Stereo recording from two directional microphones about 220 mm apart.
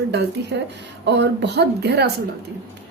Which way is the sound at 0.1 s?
50° right (ahead or behind).